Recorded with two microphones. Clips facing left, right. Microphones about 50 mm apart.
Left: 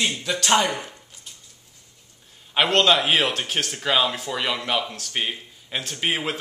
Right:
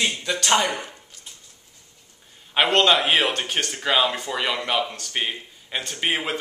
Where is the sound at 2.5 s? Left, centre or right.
Centre.